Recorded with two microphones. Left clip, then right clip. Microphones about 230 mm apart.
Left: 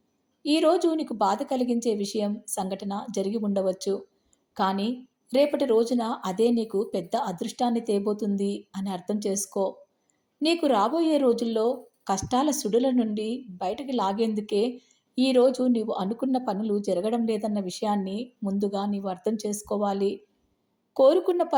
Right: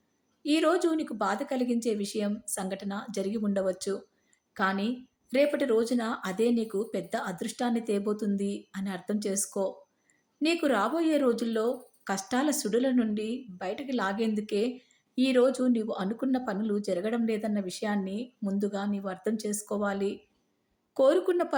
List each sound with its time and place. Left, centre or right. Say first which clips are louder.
0.4 s a woman's voice: left 4 dB; centre
9.5 s speech: left 4 dB; centre
10.4 s a woman's voice: left 4 dB; centre